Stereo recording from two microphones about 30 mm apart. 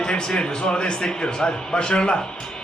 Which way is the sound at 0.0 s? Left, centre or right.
Left.